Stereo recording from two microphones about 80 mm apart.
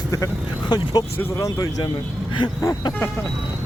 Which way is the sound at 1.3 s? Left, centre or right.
Left.